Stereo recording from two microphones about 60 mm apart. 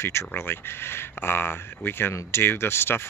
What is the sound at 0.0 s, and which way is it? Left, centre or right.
Speech, left.